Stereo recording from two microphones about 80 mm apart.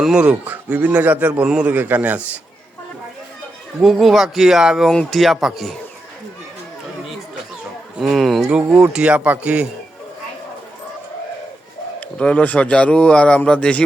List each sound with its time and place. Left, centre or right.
0.0 s a man's voice: centre
1.5 s speech: centre
1.7 s a man's voice: right
3.8 s speech: centre
4.9 s speech: centre
7.9 s speech: centre
11.9 s a man's voice: centre